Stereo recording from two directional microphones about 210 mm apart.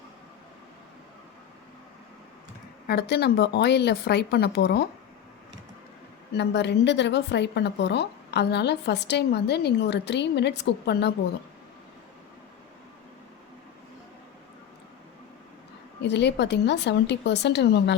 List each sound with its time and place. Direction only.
2.8 s speech: 50° left (ahead or behind)
6.3 s speech: 55° left (ahead or behind)
16.0 s a woman's voice: 55° left (ahead or behind)